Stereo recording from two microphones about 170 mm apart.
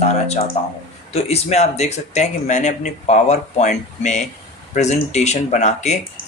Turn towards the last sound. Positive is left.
turn(degrees=45)  # may be behind; listen again after turning